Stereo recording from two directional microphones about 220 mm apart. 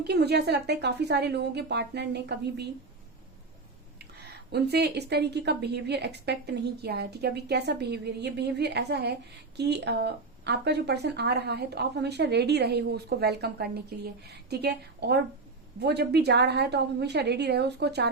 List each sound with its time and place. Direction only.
0.0 s speech: 50° right (ahead or behind)
4.5 s speech: 50° right (ahead or behind)